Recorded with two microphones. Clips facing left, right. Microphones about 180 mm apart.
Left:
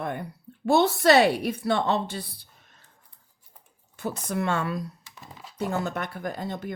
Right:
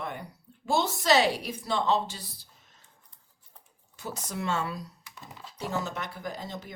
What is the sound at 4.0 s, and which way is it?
A woman's voice, 60° left (ahead or behind).